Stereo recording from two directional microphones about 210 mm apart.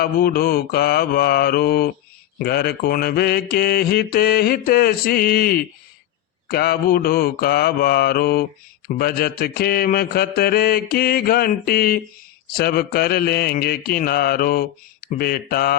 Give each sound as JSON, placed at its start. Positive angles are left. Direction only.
{"t": 0.0, "sound": "mantra", "side_deg": 45}